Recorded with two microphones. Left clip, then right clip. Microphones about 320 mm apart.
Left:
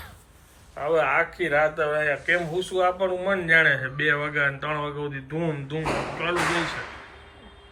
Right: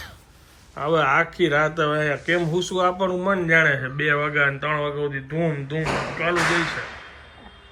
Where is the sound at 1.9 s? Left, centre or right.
Right.